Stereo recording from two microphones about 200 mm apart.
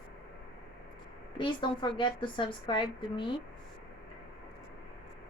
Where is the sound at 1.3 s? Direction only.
25° left (ahead or behind).